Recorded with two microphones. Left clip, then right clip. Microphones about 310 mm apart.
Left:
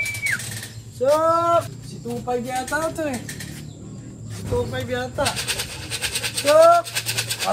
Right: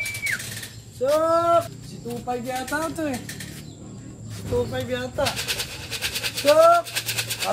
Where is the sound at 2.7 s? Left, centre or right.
Left.